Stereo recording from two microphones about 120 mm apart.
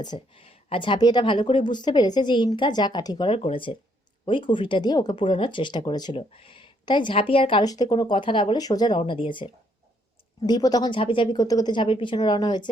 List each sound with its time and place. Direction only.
0.0 s a woman's voice: 35° left (ahead or behind)
3.2 s a woman's voice: 50° left (ahead or behind); by 6.1 s 35° left (ahead or behind)
6.1 s speech: 50° left (ahead or behind)
7.6 s a woman's voice: 35° left (ahead or behind)
8.6 s a woman's voice: 35° left (ahead or behind)
9.0 s speech: 50° left (ahead or behind)
10.4 s a woman's voice: 35° left (ahead or behind)